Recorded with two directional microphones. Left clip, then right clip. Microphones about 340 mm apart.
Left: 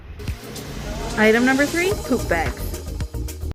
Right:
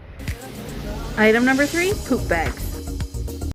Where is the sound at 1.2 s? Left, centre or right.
Centre.